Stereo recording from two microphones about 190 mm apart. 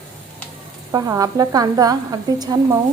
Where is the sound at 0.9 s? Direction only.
15° right (ahead or behind).